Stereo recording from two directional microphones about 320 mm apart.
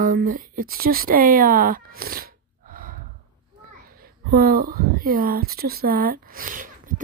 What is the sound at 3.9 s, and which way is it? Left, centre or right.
A woman's voice, right.